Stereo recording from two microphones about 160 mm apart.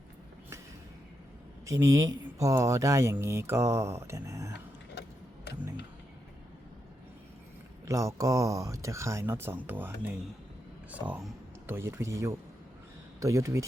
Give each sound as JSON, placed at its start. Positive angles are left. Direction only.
{"t": 1.6, "sound": "speech", "side_deg": -20}
{"t": 7.9, "sound": "speech", "side_deg": -20}